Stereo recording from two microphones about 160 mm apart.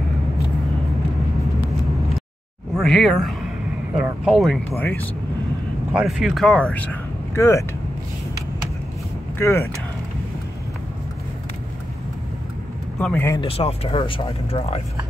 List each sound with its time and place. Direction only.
2.7 s speech: centre (ahead or behind)
4.6 s speech: 10° left (ahead or behind)
5.9 s speech: centre (ahead or behind); by 7.6 s 20° left (ahead or behind)
9.4 s speech: 15° left (ahead or behind)
13.0 s speech: 5° left (ahead or behind)
13.4 s speech: 40° left (ahead or behind)